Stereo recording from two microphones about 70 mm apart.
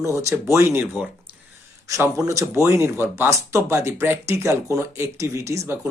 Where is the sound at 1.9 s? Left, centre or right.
Right.